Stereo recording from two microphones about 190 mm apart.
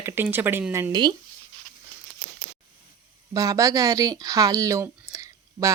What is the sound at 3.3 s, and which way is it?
A woman's voice, 20° right (ahead or behind).